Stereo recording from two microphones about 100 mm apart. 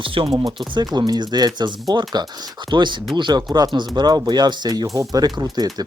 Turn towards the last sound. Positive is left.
turn(degrees=-40)  # may be behind; listen again after turning